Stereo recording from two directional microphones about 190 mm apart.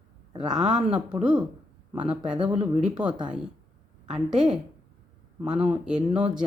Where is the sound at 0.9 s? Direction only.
5° right (ahead or behind).